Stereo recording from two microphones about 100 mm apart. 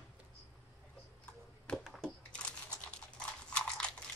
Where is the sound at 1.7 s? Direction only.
5° left (ahead or behind).